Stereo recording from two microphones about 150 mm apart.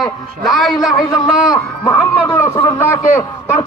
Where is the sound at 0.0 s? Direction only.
Centre (ahead or behind).